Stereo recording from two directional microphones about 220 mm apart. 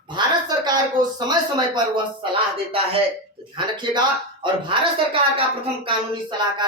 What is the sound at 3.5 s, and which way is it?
Speech, 20° right (ahead or behind).